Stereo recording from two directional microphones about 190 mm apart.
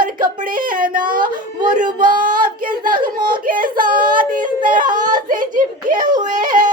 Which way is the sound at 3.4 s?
45° right (ahead or behind).